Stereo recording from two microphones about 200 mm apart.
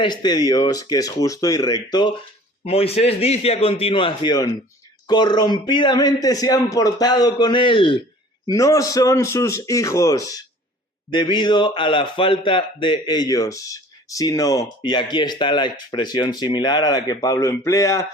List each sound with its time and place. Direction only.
0.0 s a man's voice: 20° left (ahead or behind)